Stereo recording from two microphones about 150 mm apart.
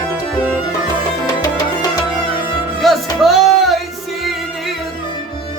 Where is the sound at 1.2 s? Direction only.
25° left (ahead or behind).